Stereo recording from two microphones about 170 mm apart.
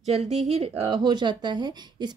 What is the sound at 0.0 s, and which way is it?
Speech, 40° right (ahead or behind).